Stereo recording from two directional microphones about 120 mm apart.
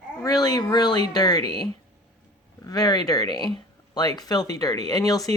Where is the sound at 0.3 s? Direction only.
30° left (ahead or behind).